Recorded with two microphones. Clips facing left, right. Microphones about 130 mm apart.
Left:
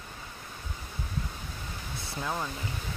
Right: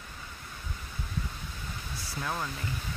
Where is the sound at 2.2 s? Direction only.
20° left (ahead or behind).